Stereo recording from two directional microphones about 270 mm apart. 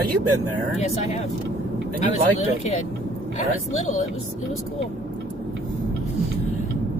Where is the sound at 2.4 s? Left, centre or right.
Left.